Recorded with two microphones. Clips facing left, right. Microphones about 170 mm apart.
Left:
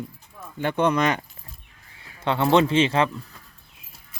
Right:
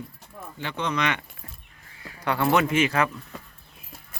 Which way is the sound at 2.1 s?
25° left (ahead or behind).